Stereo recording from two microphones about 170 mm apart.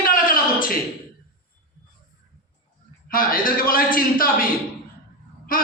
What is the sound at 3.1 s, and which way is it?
A man's voice, 55° left (ahead or behind).